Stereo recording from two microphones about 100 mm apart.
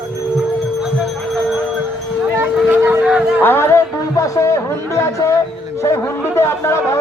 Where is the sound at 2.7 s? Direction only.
20° right (ahead or behind).